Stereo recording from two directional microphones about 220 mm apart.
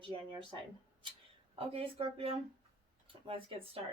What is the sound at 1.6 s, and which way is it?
Speech, 25° right (ahead or behind).